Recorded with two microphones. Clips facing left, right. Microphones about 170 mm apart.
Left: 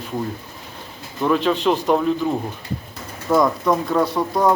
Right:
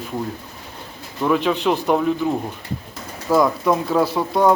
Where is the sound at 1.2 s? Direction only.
10° right (ahead or behind).